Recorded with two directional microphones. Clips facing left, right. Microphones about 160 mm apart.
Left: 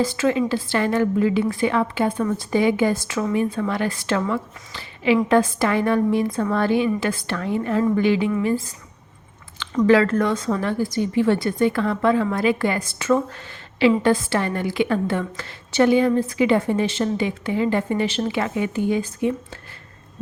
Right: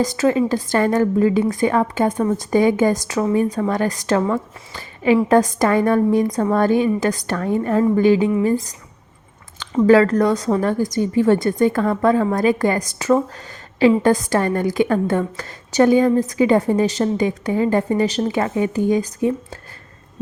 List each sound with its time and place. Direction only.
0.0 s a woman's voice: 40° right (ahead or behind)
9.8 s a woman's voice: 40° right (ahead or behind)